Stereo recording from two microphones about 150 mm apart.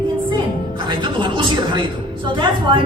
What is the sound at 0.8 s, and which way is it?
A woman's voice, 30° right (ahead or behind).